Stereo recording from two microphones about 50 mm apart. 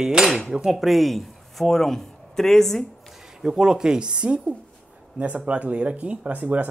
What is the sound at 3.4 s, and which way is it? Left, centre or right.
Speech, centre.